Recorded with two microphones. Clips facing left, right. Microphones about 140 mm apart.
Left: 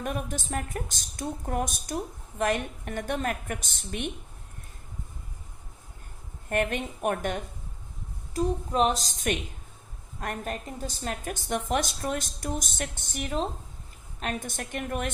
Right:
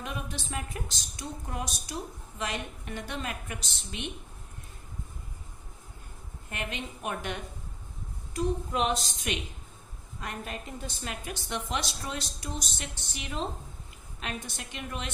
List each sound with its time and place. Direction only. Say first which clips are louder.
0.0 s a woman's voice: left 5 dB; 50° left (ahead or behind)
6.5 s a woman's voice: left 9 dB; 50° left (ahead or behind)
8.3 s a woman's voice: left 3 dB; 40° left (ahead or behind)